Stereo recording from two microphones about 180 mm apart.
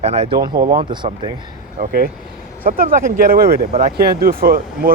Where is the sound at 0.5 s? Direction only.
55° right (ahead or behind).